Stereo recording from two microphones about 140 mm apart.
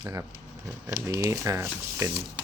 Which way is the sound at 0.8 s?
25° right (ahead or behind).